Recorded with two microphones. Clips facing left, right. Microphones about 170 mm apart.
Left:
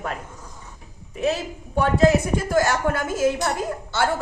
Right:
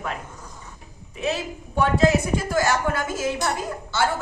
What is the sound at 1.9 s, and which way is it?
A woman's voice, 55° left (ahead or behind).